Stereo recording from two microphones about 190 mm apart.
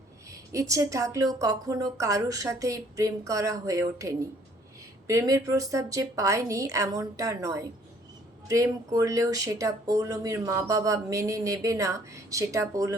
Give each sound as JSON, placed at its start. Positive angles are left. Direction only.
{"t": 0.3, "sound": "speech", "side_deg": -15}